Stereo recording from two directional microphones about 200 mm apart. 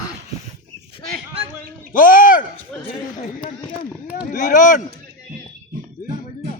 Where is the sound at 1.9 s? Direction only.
45° left (ahead or behind).